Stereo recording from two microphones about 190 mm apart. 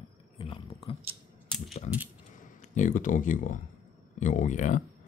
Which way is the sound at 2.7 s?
40° left (ahead or behind).